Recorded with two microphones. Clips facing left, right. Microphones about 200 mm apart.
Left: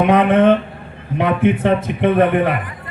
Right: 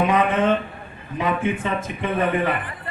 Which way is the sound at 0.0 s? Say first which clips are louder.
Left 7 dB; 60° left (ahead or behind).